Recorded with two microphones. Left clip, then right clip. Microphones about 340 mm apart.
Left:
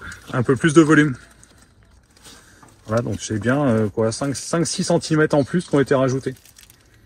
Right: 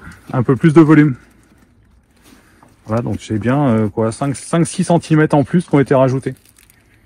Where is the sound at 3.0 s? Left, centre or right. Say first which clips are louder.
Right 3 dB; right.